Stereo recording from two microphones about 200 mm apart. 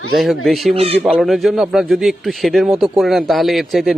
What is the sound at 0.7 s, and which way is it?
Speech, 30° right (ahead or behind).